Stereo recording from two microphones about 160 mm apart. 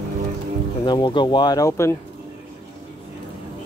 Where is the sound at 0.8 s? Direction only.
30° left (ahead or behind).